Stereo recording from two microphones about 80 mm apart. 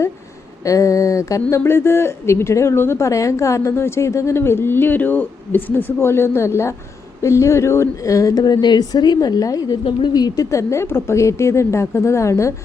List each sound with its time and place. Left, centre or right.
0.6 s speech: left
8.4 s a woman's voice: left
9.8 s a woman's voice: left
10.5 s speech: left